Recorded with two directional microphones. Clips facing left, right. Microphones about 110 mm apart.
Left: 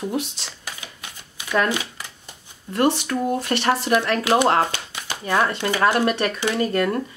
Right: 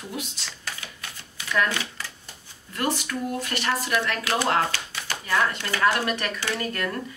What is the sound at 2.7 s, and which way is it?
Speech, 30° left (ahead or behind).